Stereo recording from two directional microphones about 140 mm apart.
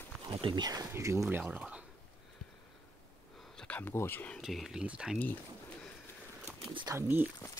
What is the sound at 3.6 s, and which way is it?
Speech, 10° left (ahead or behind).